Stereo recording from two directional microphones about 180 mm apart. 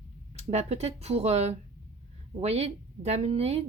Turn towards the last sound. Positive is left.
turn(degrees=-35)  # may be behind; listen again after turning